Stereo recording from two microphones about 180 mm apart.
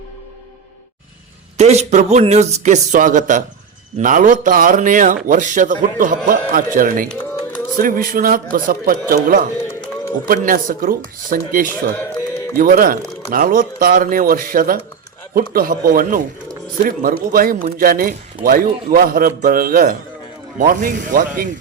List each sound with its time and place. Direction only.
1.5 s a man's voice: 40° right (ahead or behind)